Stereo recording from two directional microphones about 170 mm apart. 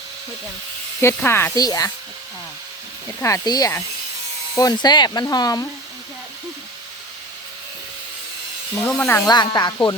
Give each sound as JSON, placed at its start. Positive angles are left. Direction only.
{"t": 1.0, "sound": "speech", "side_deg": 15}
{"t": 3.2, "sound": "speech", "side_deg": 20}
{"t": 8.8, "sound": "speech", "side_deg": 5}
{"t": 9.2, "sound": "speech", "side_deg": 25}